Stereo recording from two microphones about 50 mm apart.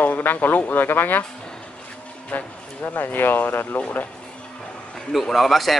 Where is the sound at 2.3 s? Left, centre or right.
Left.